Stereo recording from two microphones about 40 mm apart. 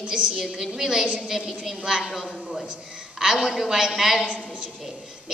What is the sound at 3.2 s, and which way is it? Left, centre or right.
A woman's voice, centre.